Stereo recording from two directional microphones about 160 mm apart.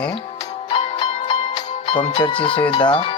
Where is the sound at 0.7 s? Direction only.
35° left (ahead or behind).